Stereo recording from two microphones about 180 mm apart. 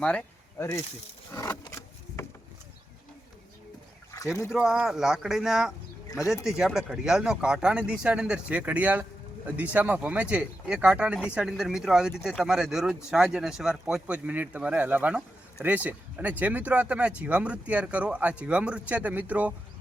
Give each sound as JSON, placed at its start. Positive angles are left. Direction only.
{"t": 0.0, "sound": "speech", "side_deg": 5}
{"t": 1.3, "sound": "a sound", "side_deg": 15}
{"t": 4.5, "sound": "speech", "side_deg": -5}